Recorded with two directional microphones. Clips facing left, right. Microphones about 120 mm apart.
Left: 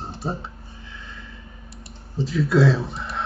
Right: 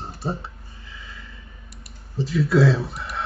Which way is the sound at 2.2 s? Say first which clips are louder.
Even; centre (ahead or behind).